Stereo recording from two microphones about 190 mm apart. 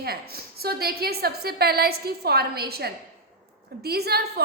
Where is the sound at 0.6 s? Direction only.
55° right (ahead or behind).